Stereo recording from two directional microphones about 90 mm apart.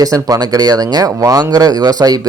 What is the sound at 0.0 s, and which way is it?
Speech, 45° right (ahead or behind).